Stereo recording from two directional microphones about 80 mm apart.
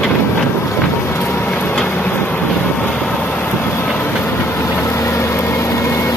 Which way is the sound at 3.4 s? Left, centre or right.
Left.